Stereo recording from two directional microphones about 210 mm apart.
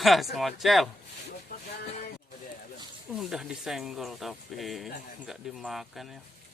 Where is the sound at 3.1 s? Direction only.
Centre (ahead or behind).